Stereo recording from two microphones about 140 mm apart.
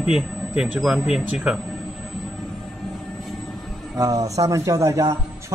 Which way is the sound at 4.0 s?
25° right (ahead or behind).